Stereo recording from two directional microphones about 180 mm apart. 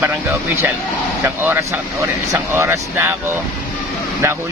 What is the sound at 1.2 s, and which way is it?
Speech, 15° right (ahead or behind).